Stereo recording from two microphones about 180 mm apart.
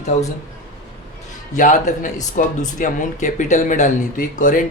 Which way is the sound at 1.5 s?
45° left (ahead or behind).